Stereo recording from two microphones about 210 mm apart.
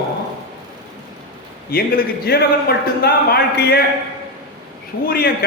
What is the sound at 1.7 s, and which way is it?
A man's voice, 45° left (ahead or behind).